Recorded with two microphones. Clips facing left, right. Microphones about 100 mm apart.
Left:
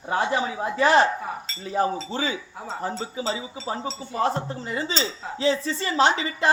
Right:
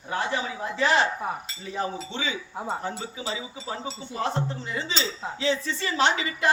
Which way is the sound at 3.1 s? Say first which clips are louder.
Left 4 dB; 35° left (ahead or behind).